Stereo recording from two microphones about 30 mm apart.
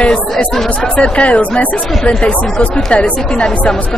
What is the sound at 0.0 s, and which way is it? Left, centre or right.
Speech, left.